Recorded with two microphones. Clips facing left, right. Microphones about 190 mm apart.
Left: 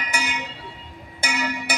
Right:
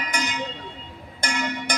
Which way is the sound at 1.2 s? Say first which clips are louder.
Even; 5° left (ahead or behind).